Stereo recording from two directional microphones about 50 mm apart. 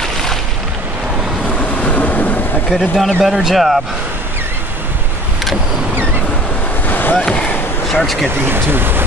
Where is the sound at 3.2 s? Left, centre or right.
Centre.